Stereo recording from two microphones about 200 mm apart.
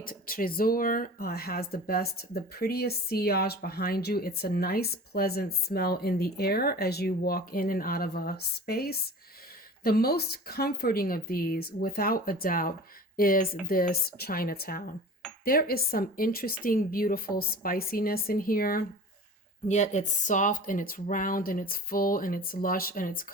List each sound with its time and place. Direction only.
0.0 s speech: 45° left (ahead or behind)
19.6 s speech: 35° left (ahead or behind)